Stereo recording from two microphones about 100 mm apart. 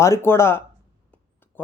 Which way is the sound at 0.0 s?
25° left (ahead or behind).